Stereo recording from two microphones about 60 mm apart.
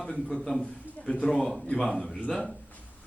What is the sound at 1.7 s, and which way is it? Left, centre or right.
Speech, centre.